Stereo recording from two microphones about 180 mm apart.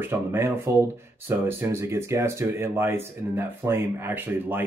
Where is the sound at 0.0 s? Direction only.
10° right (ahead or behind).